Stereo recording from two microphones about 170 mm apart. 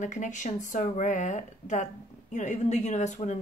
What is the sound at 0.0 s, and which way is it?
Speech, 45° left (ahead or behind).